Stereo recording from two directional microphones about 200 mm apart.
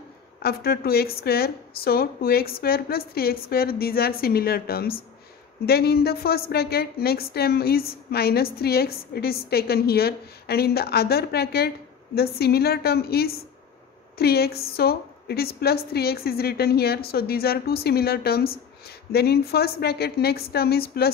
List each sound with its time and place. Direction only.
0.4 s a woman's voice: 50° left (ahead or behind)